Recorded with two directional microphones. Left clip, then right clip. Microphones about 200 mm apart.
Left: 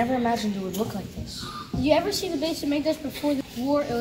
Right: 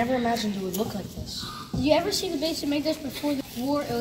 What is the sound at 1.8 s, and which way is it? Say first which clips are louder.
A woman's voice: left 1 dB; 15° left (ahead or behind).